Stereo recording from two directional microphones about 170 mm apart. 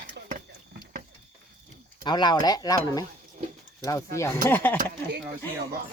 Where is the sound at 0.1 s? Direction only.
55° right (ahead or behind).